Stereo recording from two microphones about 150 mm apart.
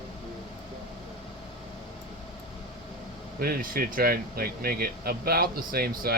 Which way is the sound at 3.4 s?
75° right (ahead or behind).